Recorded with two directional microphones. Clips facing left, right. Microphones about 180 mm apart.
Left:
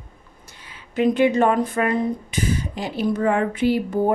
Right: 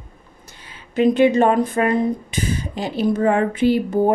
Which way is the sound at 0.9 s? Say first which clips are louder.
Right 3 dB; 25° right (ahead or behind).